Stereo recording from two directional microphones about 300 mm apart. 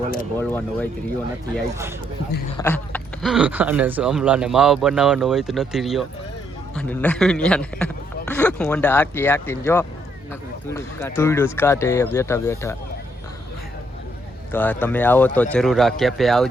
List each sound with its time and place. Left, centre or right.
0.3 s speech: centre
1.7 s speech: centre
2.6 s speech: centre
14.5 s speech: centre